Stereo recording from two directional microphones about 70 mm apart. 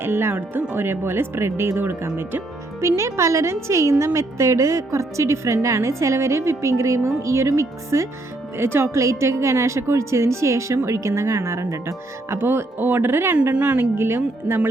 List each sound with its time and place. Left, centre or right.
0.0 s a woman's voice: right
8.5 s a woman's voice: right
12.4 s speech: right
13.3 s a woman's voice: right
13.7 s speech: right